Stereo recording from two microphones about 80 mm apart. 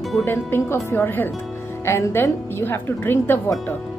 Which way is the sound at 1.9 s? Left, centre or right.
Left.